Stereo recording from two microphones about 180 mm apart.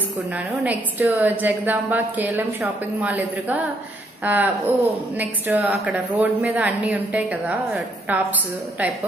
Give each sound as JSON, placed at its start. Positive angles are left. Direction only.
{"t": 0.5, "sound": "a woman's voice", "side_deg": -10}